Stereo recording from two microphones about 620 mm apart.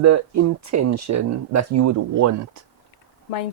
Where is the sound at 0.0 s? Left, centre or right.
Right.